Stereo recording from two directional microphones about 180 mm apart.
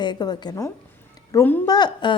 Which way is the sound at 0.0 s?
25° left (ahead or behind).